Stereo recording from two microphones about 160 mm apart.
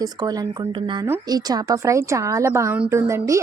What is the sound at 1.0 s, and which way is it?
A woman's voice, 20° right (ahead or behind).